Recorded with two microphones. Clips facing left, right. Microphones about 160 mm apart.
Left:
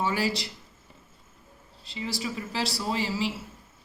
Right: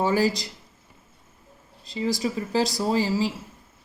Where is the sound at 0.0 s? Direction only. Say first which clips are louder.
Right 5 dB; 40° right (ahead or behind).